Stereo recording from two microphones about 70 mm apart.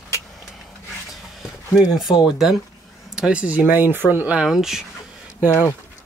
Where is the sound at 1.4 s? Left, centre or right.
Centre.